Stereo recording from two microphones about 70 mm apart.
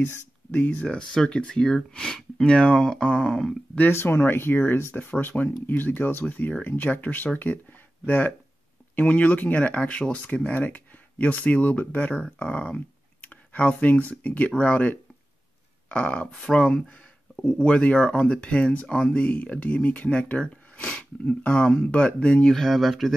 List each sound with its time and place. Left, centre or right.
0.5 s speech: centre
3.9 s speech: left; by 22.5 s centre
22.5 s speech: centre